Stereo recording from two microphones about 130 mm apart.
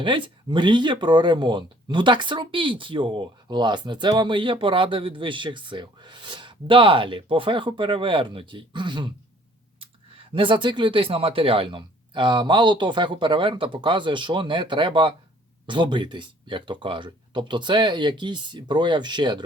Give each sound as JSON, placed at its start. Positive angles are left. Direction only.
{"t": 0.0, "sound": "speech", "side_deg": -40}